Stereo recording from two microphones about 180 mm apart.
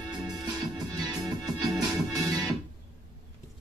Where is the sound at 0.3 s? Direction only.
20° right (ahead or behind).